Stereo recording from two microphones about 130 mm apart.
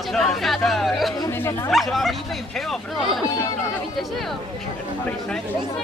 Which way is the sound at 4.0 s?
Centre (ahead or behind).